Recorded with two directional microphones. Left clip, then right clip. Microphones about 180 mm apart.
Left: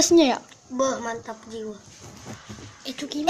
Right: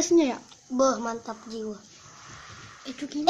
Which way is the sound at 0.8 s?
Centre (ahead or behind).